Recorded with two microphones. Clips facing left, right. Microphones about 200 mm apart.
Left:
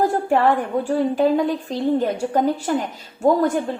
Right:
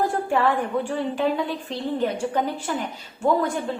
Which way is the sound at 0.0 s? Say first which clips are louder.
Left 4 dB; 40° left (ahead or behind).